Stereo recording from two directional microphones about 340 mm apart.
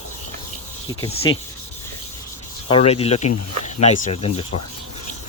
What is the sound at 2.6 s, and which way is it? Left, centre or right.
Speech, centre.